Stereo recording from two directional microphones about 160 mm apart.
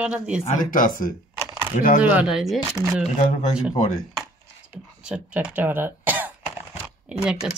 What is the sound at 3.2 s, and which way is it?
Speech, 55° left (ahead or behind).